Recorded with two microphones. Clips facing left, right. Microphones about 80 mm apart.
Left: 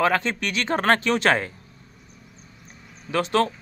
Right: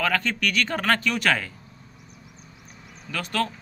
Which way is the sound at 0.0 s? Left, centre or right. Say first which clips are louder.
Left 3 dB; left.